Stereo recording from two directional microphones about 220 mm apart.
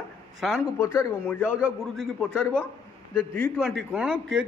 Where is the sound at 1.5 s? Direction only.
5° right (ahead or behind).